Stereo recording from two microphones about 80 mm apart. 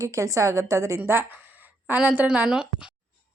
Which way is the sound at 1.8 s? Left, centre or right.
Centre.